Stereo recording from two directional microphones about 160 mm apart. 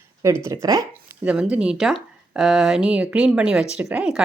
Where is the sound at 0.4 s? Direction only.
20° right (ahead or behind).